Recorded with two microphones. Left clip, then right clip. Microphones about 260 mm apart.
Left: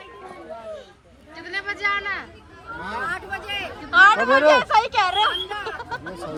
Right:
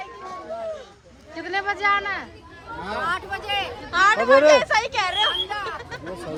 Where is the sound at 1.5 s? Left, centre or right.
Right.